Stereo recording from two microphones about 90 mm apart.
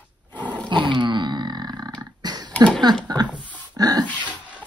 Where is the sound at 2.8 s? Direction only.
50° right (ahead or behind).